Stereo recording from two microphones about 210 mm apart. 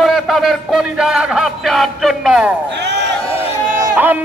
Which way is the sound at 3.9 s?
10° right (ahead or behind).